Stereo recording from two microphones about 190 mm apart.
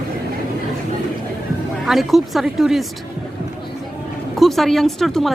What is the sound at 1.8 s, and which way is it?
Speech, centre (ahead or behind).